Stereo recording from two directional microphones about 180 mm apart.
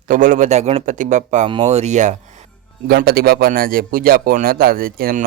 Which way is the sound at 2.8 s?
60° right (ahead or behind).